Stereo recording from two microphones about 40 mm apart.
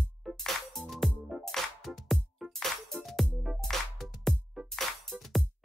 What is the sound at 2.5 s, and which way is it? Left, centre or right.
Music, centre.